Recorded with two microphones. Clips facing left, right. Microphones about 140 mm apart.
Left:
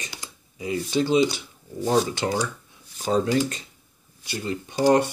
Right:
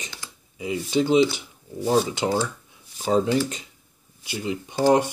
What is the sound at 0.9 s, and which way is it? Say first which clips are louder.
Speech: right 2 dB; 15° right (ahead or behind).